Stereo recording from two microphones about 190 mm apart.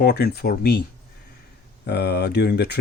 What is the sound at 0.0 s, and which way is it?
Speech, 55° left (ahead or behind).